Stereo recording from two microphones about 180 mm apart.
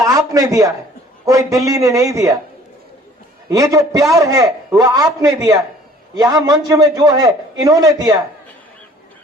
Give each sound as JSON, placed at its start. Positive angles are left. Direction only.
{"t": 0.0, "sound": "a sound", "side_deg": -20}
{"t": 1.2, "sound": "a man's voice", "side_deg": -20}
{"t": 3.5, "sound": "a man's voice", "side_deg": -20}